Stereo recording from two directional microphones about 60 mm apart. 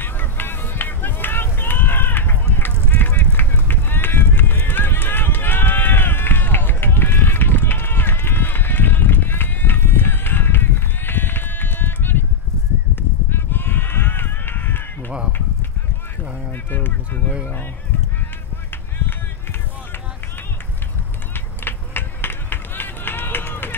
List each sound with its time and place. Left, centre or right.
0.0 s run: left
2.9 s clip-clop: left
3.3 s run: left
12.9 s a sound: left
16.7 s a sound: left
21.6 s run: left